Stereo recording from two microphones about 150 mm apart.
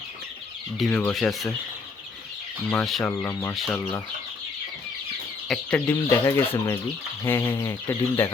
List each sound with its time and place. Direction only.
0.9 s speech: 10° left (ahead or behind)
2.6 s speech: 5° left (ahead or behind)
3.0 s speech: 20° left (ahead or behind)
3.5 s speech: centre (ahead or behind)
5.5 s speech: 10° left (ahead or behind)